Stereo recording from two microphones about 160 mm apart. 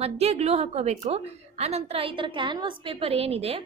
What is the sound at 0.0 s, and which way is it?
A woman's voice, 40° right (ahead or behind).